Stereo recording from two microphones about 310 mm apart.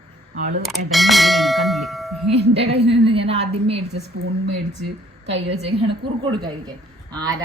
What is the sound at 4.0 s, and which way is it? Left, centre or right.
A woman's voice, right.